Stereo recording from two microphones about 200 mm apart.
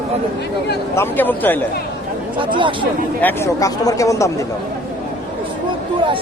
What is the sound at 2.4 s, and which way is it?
Speech, 25° right (ahead or behind).